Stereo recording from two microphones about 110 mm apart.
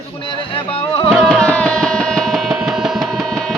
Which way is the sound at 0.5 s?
55° left (ahead or behind).